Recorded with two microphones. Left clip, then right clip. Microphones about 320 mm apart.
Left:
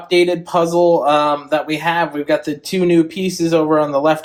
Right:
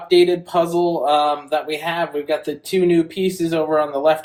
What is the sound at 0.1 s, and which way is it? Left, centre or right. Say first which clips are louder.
Speech: left 1 dB; left.